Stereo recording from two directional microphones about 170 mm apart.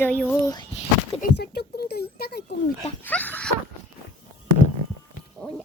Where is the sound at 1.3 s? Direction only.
75° left (ahead or behind).